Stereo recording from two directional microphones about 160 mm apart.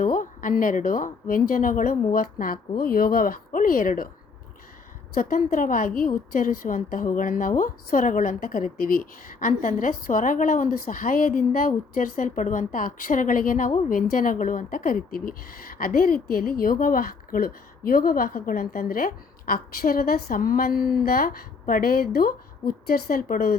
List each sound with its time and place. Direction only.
0.0 s a woman's voice: 60° left (ahead or behind)
5.1 s a woman's voice: 60° left (ahead or behind)